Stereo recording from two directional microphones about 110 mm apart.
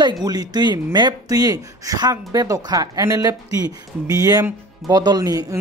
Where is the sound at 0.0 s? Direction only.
35° right (ahead or behind).